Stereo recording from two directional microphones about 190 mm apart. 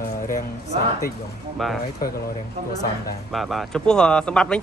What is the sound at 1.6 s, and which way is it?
Speech, centre (ahead or behind).